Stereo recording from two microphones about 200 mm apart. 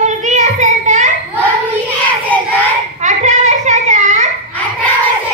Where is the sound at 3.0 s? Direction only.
35° right (ahead or behind).